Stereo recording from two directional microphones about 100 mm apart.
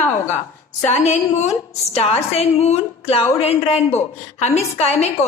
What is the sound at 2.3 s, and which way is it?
A woman's voice, 90° left.